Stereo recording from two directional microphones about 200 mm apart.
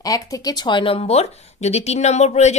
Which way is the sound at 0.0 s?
15° left (ahead or behind).